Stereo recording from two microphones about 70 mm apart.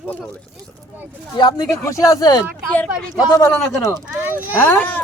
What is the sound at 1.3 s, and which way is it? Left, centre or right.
Speech, left.